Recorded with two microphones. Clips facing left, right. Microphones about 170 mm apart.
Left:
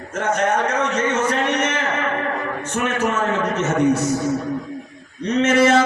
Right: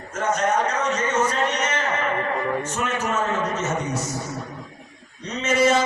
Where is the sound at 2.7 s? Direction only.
55° left (ahead or behind).